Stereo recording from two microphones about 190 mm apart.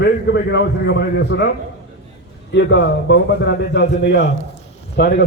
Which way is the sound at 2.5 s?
70° left (ahead or behind).